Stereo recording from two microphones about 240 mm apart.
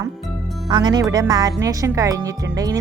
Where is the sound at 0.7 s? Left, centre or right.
Centre.